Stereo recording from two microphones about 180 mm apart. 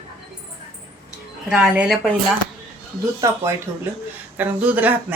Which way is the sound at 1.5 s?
5° right (ahead or behind).